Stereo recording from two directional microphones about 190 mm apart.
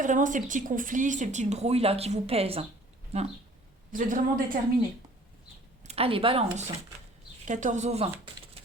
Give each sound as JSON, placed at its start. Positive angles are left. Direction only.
{"t": 0.0, "sound": "speech", "side_deg": -40}
{"t": 3.9, "sound": "speech", "side_deg": -45}
{"t": 5.8, "sound": "speech", "side_deg": -35}
{"t": 7.4, "sound": "speech", "side_deg": -40}